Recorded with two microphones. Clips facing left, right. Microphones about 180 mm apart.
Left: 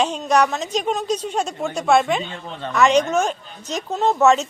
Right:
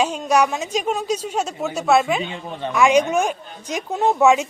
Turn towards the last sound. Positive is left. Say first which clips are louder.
# even
turn(degrees=-10)  # may be behind; listen again after turning